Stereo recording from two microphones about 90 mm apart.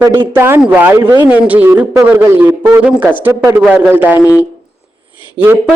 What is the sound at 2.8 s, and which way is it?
A woman's voice, 15° right (ahead or behind).